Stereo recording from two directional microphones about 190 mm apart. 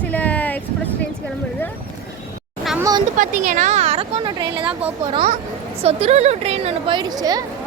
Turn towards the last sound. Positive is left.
turn(degrees=-20)  # may be behind; listen again after turning